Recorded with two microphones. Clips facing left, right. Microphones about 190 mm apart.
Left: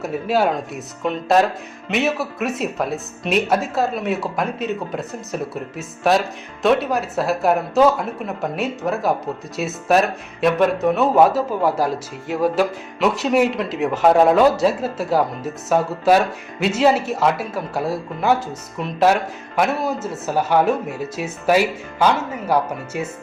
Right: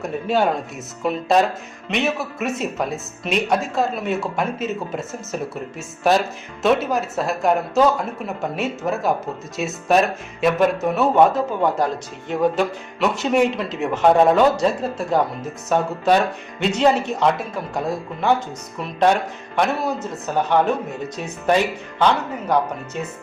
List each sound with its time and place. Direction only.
0.0 s speech: 5° left (ahead or behind)